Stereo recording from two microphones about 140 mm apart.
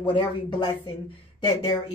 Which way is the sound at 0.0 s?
35° left (ahead or behind).